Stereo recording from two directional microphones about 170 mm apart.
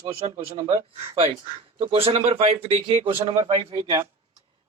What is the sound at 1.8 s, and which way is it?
Speech, 35° right (ahead or behind).